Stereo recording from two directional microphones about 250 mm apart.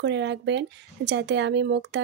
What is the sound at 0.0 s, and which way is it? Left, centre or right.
Speech, right.